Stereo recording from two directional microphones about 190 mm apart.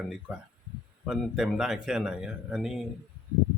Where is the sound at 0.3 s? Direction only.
5° right (ahead or behind).